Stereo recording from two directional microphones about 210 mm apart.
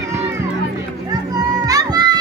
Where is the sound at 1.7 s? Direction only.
20° right (ahead or behind).